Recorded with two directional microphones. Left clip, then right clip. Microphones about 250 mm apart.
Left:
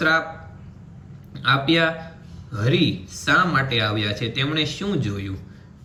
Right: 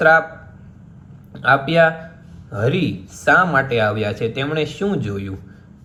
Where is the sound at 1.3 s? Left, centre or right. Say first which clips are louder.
Right 3 dB; centre.